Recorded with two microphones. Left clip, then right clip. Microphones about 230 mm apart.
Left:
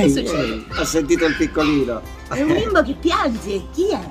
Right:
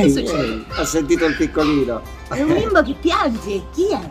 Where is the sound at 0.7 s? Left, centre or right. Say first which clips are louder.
Even; centre.